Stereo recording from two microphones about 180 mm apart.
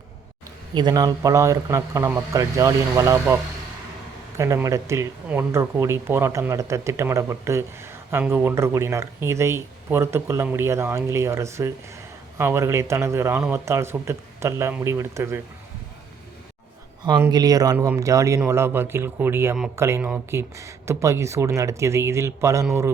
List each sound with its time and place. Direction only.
0.7 s speech: 25° right (ahead or behind)
4.4 s speech: 15° right (ahead or behind)
17.1 s speech: 20° right (ahead or behind)